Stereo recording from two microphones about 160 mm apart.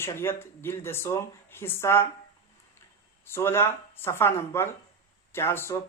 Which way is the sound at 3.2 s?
15° left (ahead or behind).